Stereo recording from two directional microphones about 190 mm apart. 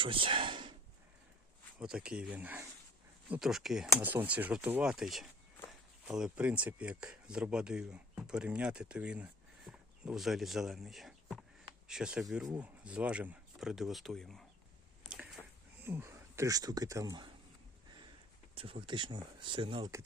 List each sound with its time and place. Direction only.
0.0 s a sound: 25° right (ahead or behind)
1.8 s speech: 5° right (ahead or behind)
15.8 s speech: 10° right (ahead or behind)
18.5 s speech: 30° right (ahead or behind)